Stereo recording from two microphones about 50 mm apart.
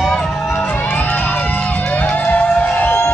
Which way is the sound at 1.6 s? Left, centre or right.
Left.